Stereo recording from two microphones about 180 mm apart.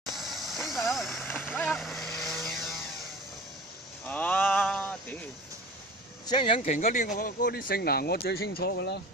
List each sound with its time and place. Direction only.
0.1 s vehicle: centre (ahead or behind)
4.0 s a sound: 10° left (ahead or behind)
6.2 s speech: 25° left (ahead or behind)
6.6 s speech: 45° left (ahead or behind); by 9.0 s 65° left (ahead or behind)